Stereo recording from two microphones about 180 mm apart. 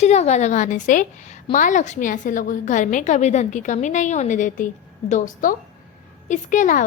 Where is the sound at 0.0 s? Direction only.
40° left (ahead or behind).